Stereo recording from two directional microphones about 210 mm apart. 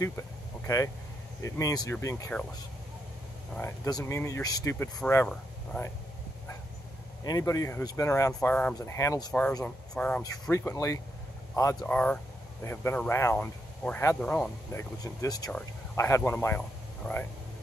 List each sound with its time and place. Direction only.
1.4 s speech: 15° left (ahead or behind)
3.5 s speech: 15° left (ahead or behind)
7.2 s speech: 15° left (ahead or behind)
9.9 s speech: 5° left (ahead or behind)